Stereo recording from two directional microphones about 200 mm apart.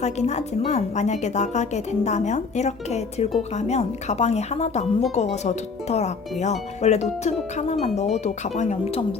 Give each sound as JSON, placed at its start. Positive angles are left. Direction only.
{"t": 0.0, "sound": "a woman's voice", "side_deg": 35}